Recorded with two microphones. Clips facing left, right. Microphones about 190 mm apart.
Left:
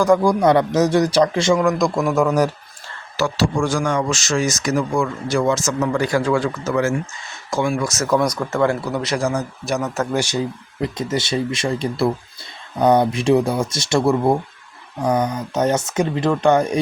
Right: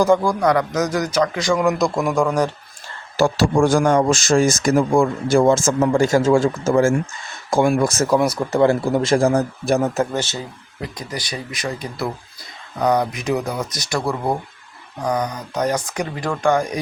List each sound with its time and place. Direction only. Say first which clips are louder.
0.2 s speech: left 3 dB; 20° left (ahead or behind)
1.5 s a man's voice: left 1 dB; 5° right (ahead or behind)
3.2 s speech: right 4 dB; 50° right (ahead or behind)
8.0 s speech: left 3 dB; 10° right (ahead or behind)
8.7 s speech: right 5 dB; 45° right (ahead or behind)
10.1 s speech: left 4 dB; 10° left (ahead or behind)